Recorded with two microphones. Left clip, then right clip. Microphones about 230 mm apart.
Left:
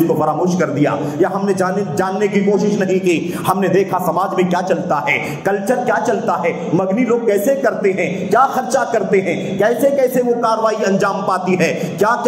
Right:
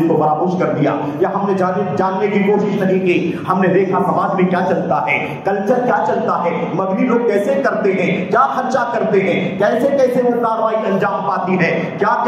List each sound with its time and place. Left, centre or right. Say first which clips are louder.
0.8 s speech: even; left
3.1 s speech: even; left
7.2 s speech: left 1 dB; left
11.5 s speech: even; left